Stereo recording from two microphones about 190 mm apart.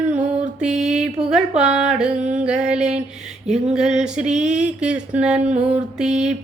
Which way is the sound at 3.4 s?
5° right (ahead or behind).